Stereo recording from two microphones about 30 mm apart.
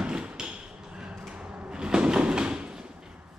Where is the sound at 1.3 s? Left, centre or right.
Right.